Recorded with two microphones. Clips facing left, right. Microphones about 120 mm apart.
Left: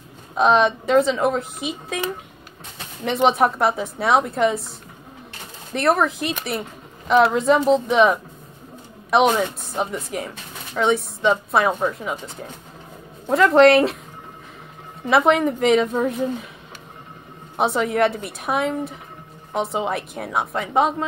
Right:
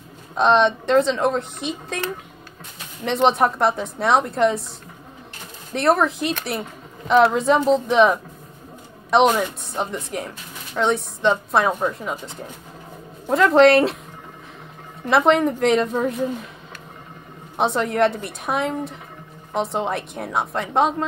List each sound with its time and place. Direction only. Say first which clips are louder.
0.3 s speech: even; 5° left (ahead or behind)
3.1 s speech: even; centre (ahead or behind)
5.7 s speech: right 1 dB; centre (ahead or behind)
13.3 s speech: even; centre (ahead or behind)
15.0 s speech: even; centre (ahead or behind)
17.6 s speech: even; centre (ahead or behind)